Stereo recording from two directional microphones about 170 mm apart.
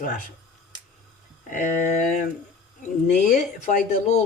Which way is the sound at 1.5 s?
50° left (ahead or behind).